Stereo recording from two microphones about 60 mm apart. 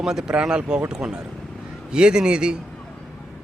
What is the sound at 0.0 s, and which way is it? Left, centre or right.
A man's voice, centre.